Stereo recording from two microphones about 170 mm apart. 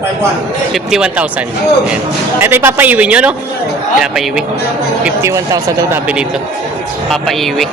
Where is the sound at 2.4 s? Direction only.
15° right (ahead or behind).